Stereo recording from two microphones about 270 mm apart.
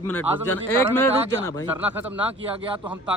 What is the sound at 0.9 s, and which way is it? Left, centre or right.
Speech, centre.